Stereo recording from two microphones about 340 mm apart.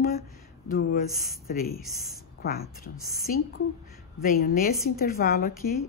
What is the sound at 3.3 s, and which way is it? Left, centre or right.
A woman's voice, left.